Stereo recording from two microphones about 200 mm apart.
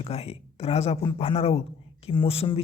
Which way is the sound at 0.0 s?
30° left (ahead or behind).